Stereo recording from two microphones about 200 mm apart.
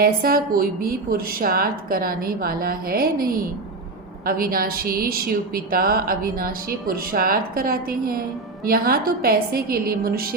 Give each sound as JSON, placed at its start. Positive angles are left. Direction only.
{"t": 0.0, "sound": "a woman's voice", "side_deg": -45}